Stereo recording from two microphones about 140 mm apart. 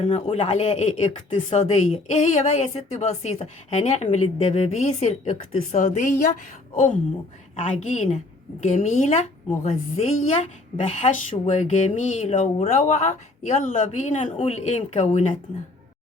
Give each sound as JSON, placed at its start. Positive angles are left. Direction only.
{"t": 0.0, "sound": "a woman's voice", "side_deg": 50}